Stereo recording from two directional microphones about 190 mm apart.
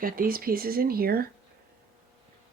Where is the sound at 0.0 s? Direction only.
50° right (ahead or behind).